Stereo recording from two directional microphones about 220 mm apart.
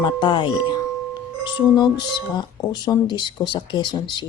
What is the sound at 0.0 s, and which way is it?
Speech, 20° left (ahead or behind).